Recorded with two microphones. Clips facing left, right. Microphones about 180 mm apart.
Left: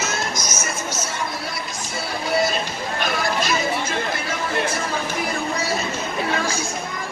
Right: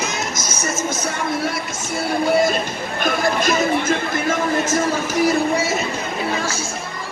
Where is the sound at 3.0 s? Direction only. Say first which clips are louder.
Right 5 dB; 50° right (ahead or behind).